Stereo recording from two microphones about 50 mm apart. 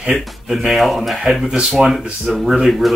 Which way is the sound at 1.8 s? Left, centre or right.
Right.